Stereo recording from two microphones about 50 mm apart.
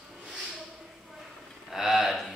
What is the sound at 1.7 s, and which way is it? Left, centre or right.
Speech, centre.